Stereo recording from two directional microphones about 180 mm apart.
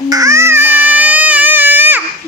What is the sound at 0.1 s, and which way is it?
Baby cry, 15° right (ahead or behind).